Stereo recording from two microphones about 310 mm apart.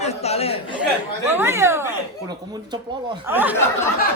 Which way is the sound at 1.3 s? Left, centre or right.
Centre.